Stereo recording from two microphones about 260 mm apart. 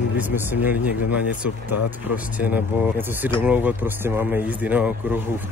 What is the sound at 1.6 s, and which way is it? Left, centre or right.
Speech, left.